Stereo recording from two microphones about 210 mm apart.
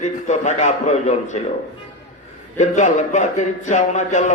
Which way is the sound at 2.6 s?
35° left (ahead or behind).